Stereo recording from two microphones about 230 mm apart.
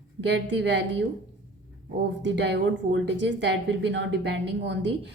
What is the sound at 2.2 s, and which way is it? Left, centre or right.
A woman's voice, right.